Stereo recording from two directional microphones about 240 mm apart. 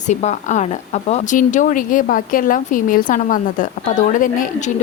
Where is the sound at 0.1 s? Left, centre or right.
Left.